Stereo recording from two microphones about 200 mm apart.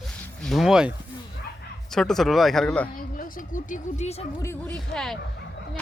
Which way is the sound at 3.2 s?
40° left (ahead or behind).